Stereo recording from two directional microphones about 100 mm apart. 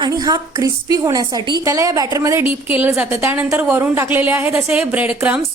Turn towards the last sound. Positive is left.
turn(degrees=-15)  # may be behind; listen again after turning